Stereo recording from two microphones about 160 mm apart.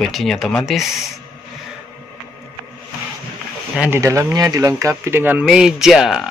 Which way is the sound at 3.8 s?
15° right (ahead or behind).